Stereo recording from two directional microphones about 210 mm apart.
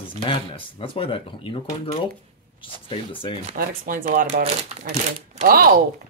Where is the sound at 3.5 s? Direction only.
40° right (ahead or behind).